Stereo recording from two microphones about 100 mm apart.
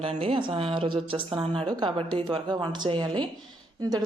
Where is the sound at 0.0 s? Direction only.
65° right (ahead or behind).